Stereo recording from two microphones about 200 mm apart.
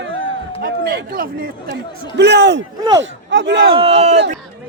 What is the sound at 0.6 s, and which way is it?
Speech, 50° right (ahead or behind).